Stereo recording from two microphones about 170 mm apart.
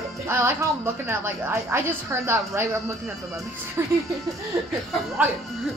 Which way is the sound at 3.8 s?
15° right (ahead or behind).